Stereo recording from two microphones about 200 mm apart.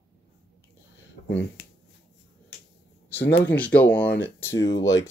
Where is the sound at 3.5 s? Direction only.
10° left (ahead or behind).